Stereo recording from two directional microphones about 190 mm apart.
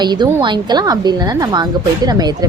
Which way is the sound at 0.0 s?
20° right (ahead or behind).